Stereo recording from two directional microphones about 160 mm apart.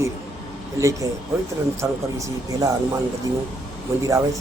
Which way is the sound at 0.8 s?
20° right (ahead or behind).